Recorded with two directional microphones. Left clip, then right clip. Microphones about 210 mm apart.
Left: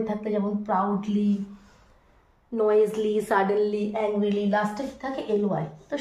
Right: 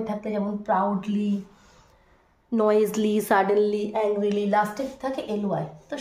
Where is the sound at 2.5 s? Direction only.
50° right (ahead or behind).